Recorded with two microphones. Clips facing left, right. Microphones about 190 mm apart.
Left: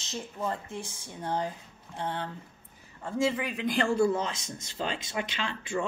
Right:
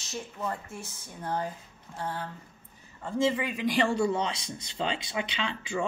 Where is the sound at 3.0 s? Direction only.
Centre (ahead or behind).